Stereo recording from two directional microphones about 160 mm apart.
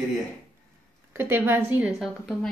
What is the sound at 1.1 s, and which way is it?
A woman's voice, 15° right (ahead or behind).